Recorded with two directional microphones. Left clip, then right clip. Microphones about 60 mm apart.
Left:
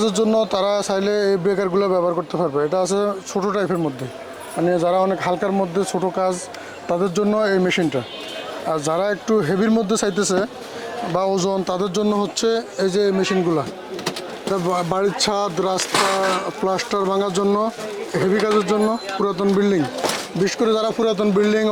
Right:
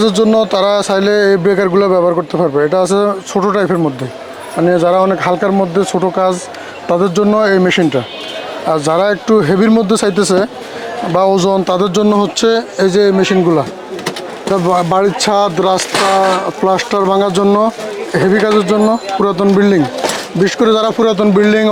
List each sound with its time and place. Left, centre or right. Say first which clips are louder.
0.0 s speech: right 7 dB; right
14.7 s speech: right 9 dB; right
15.9 s speech: right 8 dB; left
16.6 s speech: right 9 dB; right
18.5 s speech: right 7 dB; right